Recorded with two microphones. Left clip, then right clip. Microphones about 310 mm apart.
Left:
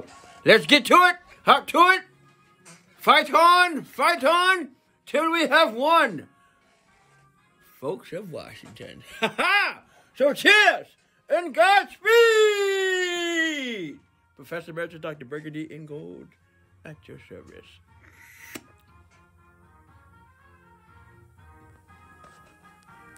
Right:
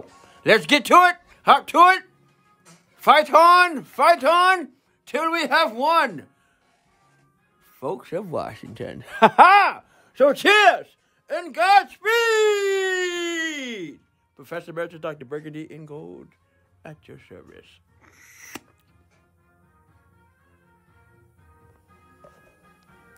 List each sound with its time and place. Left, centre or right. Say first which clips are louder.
0.3 s a man's voice: left 1 dB; centre
7.8 s speech: right 3 dB; centre
11.2 s speech: even; centre
16.8 s music: right 1 dB; centre